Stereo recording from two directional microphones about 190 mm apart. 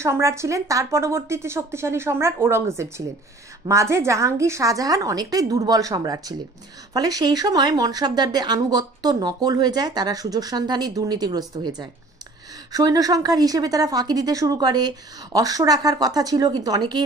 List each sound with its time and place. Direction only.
0.0 s a woman's voice: 15° right (ahead or behind)
12.7 s speech: 20° right (ahead or behind)